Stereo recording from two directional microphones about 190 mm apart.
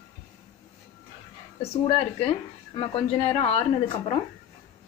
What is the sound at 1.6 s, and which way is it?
A woman's voice, 35° left (ahead or behind).